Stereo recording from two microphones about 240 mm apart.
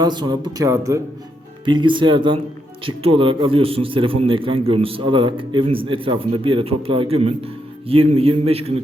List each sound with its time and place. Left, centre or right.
0.0 s a man's voice: centre